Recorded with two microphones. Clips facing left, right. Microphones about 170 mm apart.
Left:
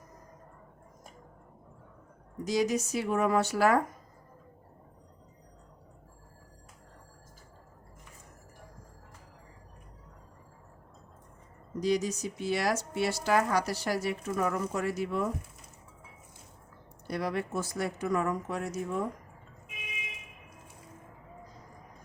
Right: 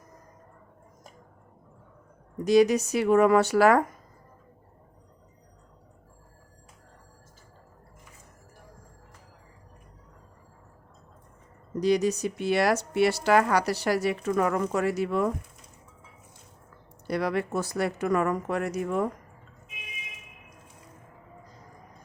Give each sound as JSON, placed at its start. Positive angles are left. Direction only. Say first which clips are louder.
{"t": 2.4, "sound": "speech", "louder": "right 8 dB", "side_deg": -65}
{"t": 11.8, "sound": "speech", "louder": "right 5 dB", "side_deg": -70}
{"t": 17.1, "sound": "speech", "louder": "right 5 dB", "side_deg": -75}